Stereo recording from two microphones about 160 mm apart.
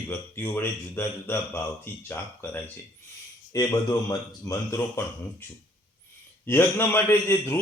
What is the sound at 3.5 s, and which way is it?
A man's voice, 25° left (ahead or behind).